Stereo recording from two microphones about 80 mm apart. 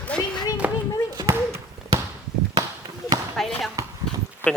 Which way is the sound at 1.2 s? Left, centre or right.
Right.